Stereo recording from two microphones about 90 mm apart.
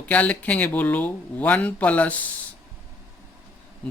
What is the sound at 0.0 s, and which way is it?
Speech, 15° left (ahead or behind).